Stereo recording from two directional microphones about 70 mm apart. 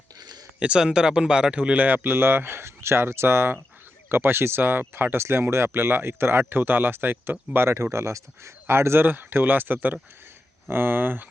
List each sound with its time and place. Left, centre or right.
0.6 s speech: centre